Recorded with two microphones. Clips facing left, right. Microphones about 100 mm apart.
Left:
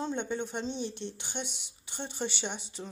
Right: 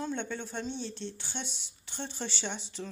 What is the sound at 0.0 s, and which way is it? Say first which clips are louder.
Speech: left 2 dB; 15° left (ahead or behind).